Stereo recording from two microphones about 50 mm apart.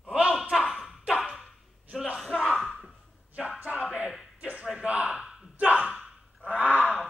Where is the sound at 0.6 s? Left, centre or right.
Centre.